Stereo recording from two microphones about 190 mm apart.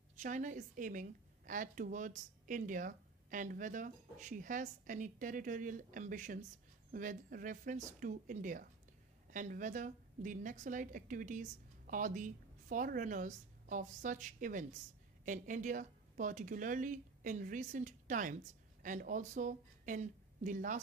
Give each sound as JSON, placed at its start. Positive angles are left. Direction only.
{"t": 0.2, "sound": "a woman's voice", "side_deg": -40}